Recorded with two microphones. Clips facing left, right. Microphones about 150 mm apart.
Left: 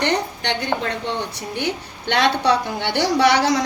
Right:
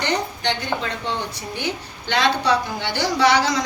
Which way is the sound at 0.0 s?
65° left (ahead or behind).